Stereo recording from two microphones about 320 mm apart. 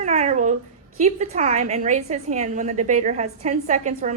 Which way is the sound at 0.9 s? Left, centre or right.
Right.